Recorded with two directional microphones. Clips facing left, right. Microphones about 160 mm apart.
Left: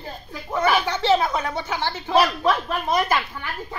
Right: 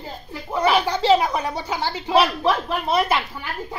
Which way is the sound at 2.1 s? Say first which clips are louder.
Right 1 dB; 30° right (ahead or behind).